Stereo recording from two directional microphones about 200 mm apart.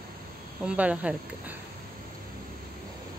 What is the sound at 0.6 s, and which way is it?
Speech, 5° right (ahead or behind).